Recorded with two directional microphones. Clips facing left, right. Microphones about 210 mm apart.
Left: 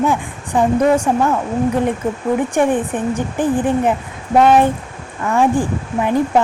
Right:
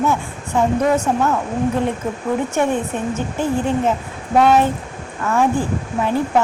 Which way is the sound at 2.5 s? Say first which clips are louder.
Left 3 dB; 15° left (ahead or behind).